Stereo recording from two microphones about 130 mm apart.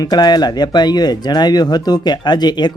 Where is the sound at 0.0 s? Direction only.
30° left (ahead or behind).